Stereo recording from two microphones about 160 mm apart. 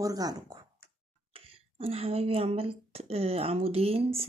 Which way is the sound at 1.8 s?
40° right (ahead or behind).